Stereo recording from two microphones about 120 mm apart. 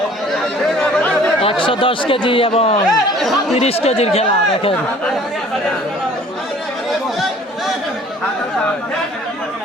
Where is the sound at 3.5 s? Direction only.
60° left (ahead or behind).